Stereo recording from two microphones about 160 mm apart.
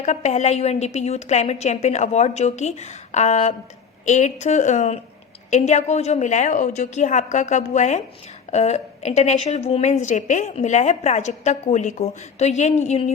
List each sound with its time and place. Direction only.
0.0 s a woman's voice: 45° left (ahead or behind)